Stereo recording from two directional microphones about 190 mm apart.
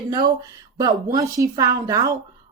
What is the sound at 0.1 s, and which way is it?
A woman's voice, 20° right (ahead or behind).